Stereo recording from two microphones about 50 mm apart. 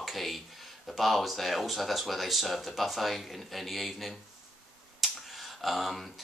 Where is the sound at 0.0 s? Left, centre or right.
Centre.